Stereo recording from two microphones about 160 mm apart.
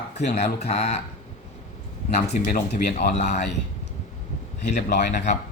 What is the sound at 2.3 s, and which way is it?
Speech, 65° left (ahead or behind).